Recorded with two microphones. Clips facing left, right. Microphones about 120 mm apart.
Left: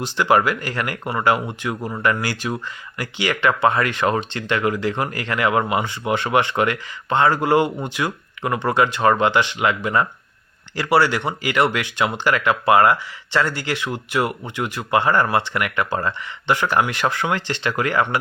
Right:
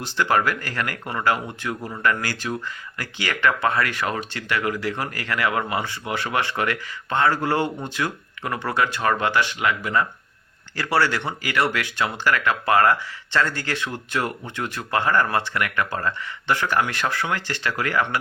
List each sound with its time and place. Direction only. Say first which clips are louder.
0.0 s speech: left 4 dB; 15° left (ahead or behind)